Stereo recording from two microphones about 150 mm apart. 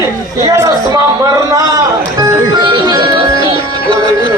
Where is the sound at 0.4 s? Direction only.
25° right (ahead or behind).